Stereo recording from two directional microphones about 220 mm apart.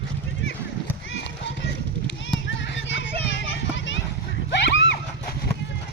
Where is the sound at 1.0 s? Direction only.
55° left (ahead or behind).